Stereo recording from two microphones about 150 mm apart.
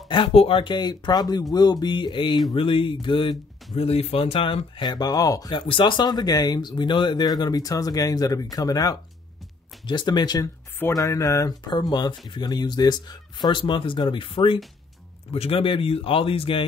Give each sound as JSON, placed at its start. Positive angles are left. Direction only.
{"t": 0.1, "sound": "speech", "side_deg": 35}